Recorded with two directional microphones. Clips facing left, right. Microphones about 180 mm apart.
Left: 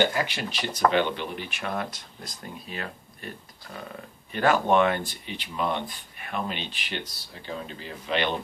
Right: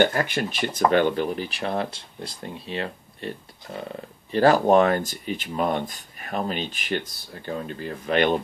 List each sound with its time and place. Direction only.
0.0 s speech: 50° right (ahead or behind)